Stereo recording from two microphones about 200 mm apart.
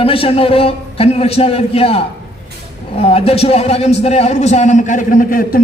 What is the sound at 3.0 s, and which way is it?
A man's voice, 30° left (ahead or behind).